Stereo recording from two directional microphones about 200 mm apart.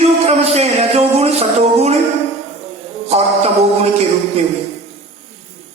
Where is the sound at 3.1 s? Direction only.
30° right (ahead or behind).